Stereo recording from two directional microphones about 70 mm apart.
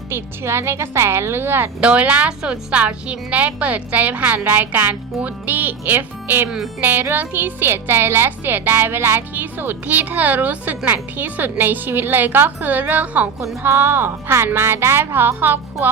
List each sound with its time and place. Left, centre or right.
0.1 s speech: right
1.8 s a woman's voice: centre
13.6 s speech: right